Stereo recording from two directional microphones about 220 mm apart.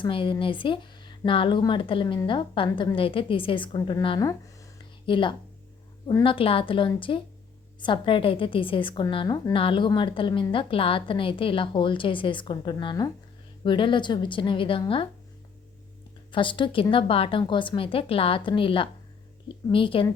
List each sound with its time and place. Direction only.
0.0 s a woman's voice: 20° left (ahead or behind)
16.3 s a woman's voice: 20° left (ahead or behind)